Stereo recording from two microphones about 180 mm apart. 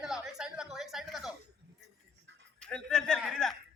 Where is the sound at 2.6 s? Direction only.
5° left (ahead or behind).